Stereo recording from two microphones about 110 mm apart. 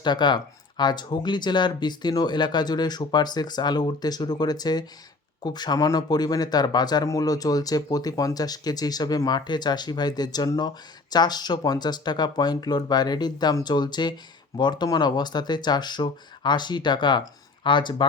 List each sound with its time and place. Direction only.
0.0 s speech: 45° left (ahead or behind)